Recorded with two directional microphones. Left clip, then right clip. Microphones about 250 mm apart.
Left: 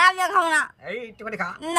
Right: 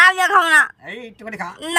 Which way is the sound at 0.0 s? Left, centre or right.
Centre.